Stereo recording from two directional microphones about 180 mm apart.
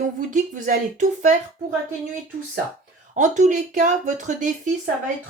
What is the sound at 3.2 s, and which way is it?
Speech, 40° right (ahead or behind).